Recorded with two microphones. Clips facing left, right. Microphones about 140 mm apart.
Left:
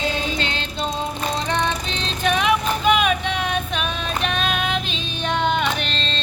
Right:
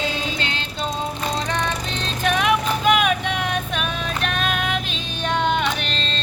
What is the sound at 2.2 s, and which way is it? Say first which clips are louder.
Vehicle: even; 10° right (ahead or behind).